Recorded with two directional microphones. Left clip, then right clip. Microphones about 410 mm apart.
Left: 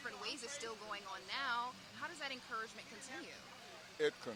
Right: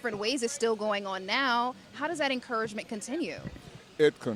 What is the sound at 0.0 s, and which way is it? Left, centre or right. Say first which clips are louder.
Speech: right 15 dB; right.